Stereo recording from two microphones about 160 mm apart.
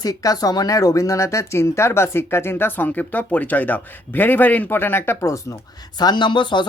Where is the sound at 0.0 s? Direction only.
20° left (ahead or behind).